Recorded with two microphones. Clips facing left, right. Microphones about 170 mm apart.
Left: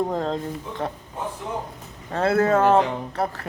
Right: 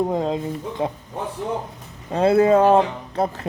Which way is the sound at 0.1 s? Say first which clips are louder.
Right 3 dB; 15° right (ahead or behind).